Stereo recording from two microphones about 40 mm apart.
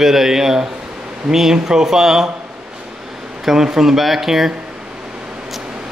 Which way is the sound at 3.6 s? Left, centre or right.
Centre.